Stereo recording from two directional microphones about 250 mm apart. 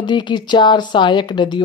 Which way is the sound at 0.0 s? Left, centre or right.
Centre.